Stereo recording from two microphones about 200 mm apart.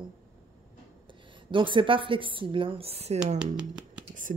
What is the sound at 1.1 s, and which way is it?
A woman's voice, 25° right (ahead or behind).